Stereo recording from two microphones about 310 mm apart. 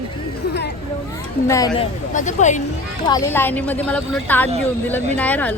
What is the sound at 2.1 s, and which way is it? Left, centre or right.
Speech, left.